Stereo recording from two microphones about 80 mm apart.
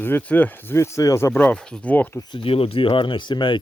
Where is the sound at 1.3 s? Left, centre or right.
Centre.